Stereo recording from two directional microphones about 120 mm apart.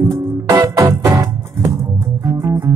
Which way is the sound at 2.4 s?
25° right (ahead or behind).